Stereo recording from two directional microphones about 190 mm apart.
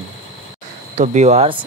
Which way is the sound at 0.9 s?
40° right (ahead or behind).